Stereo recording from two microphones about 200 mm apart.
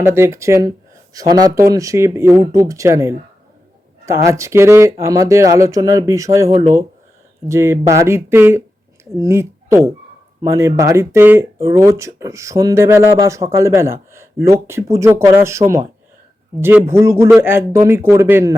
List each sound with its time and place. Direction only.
0.0 s speech: 10° right (ahead or behind)
6.5 s speech: 25° right (ahead or behind)
7.4 s speech: 15° right (ahead or behind)